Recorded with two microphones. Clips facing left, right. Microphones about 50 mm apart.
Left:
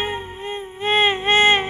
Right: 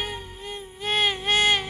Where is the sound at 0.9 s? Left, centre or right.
Left.